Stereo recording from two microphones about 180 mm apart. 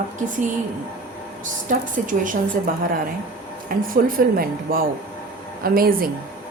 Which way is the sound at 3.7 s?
50° right (ahead or behind).